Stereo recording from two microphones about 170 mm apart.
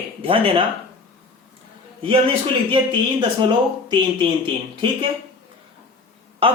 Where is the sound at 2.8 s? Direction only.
30° right (ahead or behind).